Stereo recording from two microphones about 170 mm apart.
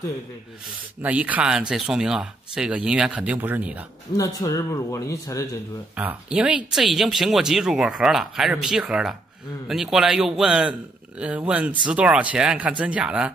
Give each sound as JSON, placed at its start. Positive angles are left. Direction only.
{"t": 1.0, "sound": "speech", "side_deg": -10}
{"t": 4.2, "sound": "speech", "side_deg": 20}
{"t": 5.9, "sound": "speech", "side_deg": -5}